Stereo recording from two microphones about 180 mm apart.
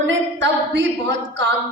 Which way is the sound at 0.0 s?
85° right.